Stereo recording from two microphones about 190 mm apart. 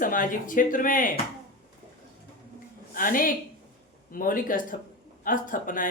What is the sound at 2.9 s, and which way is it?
A woman's voice, 45° left (ahead or behind).